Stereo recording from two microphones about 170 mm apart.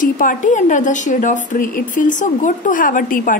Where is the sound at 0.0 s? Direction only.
50° left (ahead or behind).